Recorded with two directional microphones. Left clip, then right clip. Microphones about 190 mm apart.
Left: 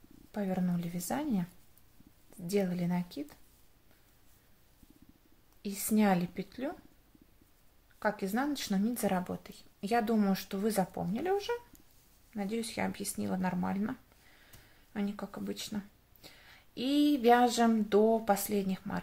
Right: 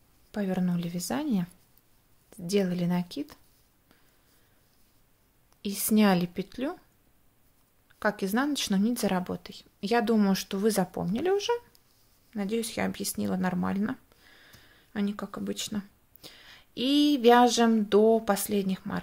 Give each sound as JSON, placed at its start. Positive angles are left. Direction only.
{"t": 0.3, "sound": "speech", "side_deg": -35}
{"t": 5.6, "sound": "speech", "side_deg": -40}
{"t": 8.0, "sound": "speech", "side_deg": -40}